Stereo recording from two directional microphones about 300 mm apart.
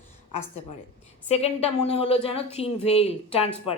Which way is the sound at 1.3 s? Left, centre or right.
Left.